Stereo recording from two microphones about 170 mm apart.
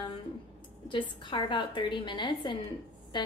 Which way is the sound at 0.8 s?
30° left (ahead or behind).